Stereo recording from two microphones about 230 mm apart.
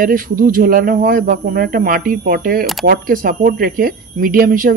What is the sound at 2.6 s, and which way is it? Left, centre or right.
Speech, centre.